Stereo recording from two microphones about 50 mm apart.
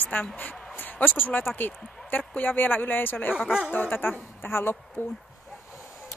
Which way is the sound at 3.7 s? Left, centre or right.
Left.